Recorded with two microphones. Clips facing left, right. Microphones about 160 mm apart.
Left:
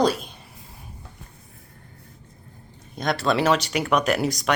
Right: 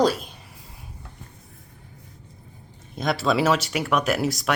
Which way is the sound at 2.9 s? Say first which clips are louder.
Even; centre (ahead or behind).